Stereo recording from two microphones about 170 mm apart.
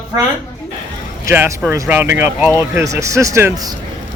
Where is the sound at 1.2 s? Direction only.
10° right (ahead or behind).